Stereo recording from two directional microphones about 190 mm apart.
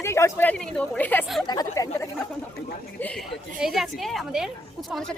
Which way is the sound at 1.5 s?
20° left (ahead or behind).